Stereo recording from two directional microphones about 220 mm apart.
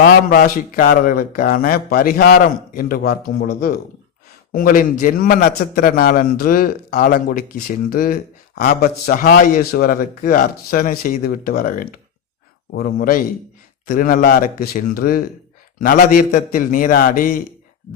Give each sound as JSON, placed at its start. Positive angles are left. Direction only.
{"t": 0.0, "sound": "a man's voice", "side_deg": 40}